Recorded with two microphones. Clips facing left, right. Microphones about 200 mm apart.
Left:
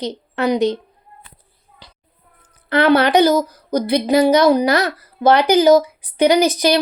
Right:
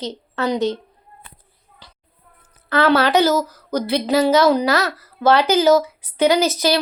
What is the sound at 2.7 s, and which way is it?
Speech, 15° left (ahead or behind).